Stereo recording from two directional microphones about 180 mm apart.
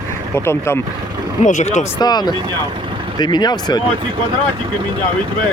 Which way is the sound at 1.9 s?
25° left (ahead or behind).